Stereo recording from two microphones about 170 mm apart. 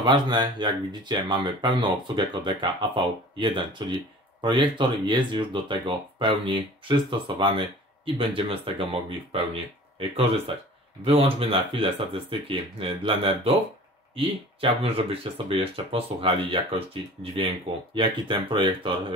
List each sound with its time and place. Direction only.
0.0 s speech: 25° right (ahead or behind)